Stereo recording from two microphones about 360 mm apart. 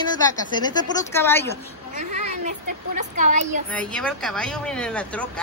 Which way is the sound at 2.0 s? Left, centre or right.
Right.